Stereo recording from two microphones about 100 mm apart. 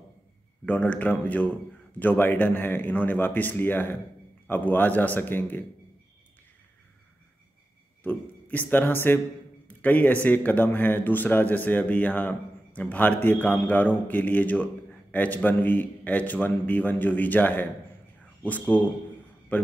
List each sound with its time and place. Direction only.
0.7 s a man's voice: 15° left (ahead or behind)
8.0 s speech: 20° left (ahead or behind)
9.7 s a sound: 15° left (ahead or behind)
10.2 s a man's voice: 15° left (ahead or behind)